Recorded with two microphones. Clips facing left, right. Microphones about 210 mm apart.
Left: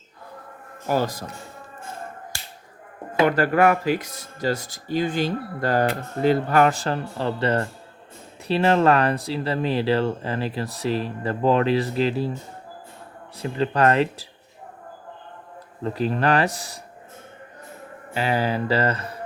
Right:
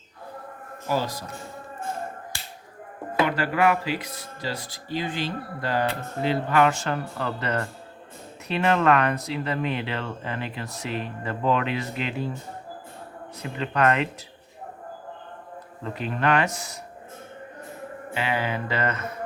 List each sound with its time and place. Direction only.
0.9 s speech: 50° left (ahead or behind)
3.2 s speech: 45° left (ahead or behind)
13.4 s speech: 35° left (ahead or behind)
15.8 s speech: 35° left (ahead or behind)
18.1 s speech: 40° left (ahead or behind)